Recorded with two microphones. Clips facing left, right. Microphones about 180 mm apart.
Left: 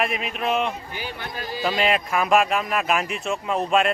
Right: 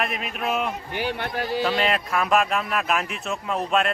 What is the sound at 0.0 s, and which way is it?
Speech, centre (ahead or behind).